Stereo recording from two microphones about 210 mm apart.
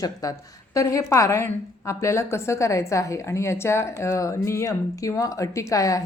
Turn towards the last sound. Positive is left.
turn(degrees=15)  # may be behind; listen again after turning